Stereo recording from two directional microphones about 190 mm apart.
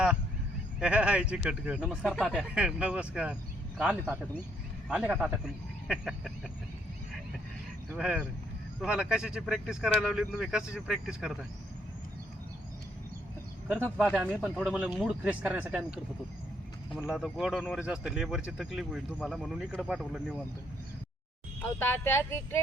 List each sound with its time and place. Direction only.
0.8 s speech: 5° right (ahead or behind)
4.9 s speech: 5° right (ahead or behind)
7.9 s speech: centre (ahead or behind)
13.7 s speech: 5° right (ahead or behind)
17.1 s speech: centre (ahead or behind)
21.6 s speech: 10° left (ahead or behind)